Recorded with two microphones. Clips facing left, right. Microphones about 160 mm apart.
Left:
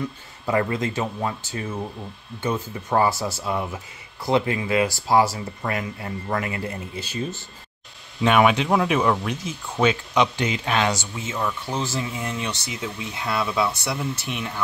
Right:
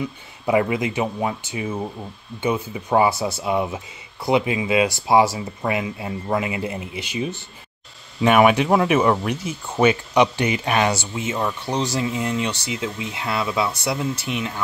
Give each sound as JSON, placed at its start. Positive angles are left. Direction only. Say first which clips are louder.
{"t": 0.0, "sound": "speech", "louder": "right 3 dB", "side_deg": -15}
{"t": 11.3, "sound": "speech", "louder": "even", "side_deg": -30}
{"t": 12.0, "sound": "speech", "louder": "right 5 dB", "side_deg": -15}